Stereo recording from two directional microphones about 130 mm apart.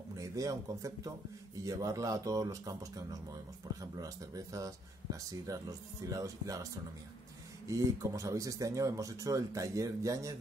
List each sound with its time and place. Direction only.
0.2 s a man's voice: 25° right (ahead or behind)